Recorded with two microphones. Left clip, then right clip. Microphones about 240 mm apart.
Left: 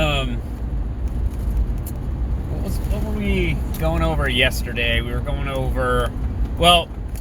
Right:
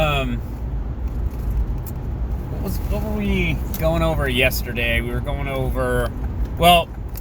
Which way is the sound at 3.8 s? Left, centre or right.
Right.